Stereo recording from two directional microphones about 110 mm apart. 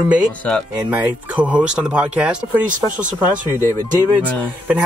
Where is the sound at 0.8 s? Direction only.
15° right (ahead or behind).